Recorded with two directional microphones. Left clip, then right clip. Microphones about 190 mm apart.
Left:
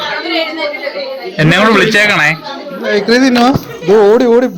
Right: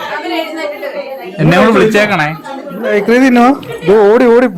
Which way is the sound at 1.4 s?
Centre (ahead or behind).